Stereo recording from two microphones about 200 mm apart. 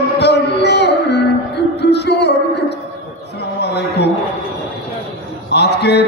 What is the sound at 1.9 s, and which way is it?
Music, 55° left (ahead or behind).